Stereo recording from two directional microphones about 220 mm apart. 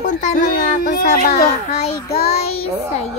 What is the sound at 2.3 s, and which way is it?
Child singing, 30° left (ahead or behind).